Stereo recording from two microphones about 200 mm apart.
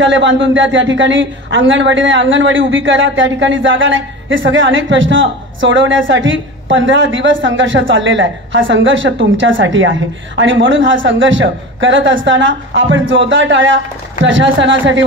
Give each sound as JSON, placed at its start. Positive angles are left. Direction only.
{"t": 0.0, "sound": "a woman's voice", "side_deg": -70}